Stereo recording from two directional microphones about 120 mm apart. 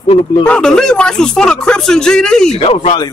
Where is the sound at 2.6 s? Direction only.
55° left (ahead or behind).